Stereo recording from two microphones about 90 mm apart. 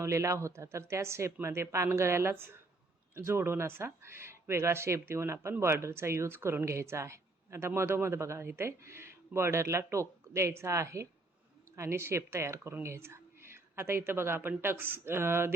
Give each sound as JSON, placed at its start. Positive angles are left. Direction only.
{"t": 0.0, "sound": "a woman's voice", "side_deg": -35}